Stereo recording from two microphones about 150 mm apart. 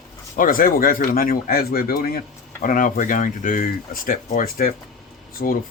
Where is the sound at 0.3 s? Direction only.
70° left (ahead or behind).